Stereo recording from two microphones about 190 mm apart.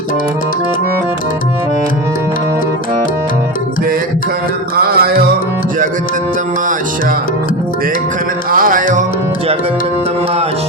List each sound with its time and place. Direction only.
4.8 s music: 55° right (ahead or behind)
8.4 s music: 50° right (ahead or behind)